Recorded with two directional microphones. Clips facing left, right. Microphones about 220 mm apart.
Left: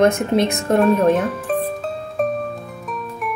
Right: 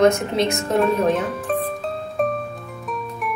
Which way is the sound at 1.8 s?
Centre (ahead or behind).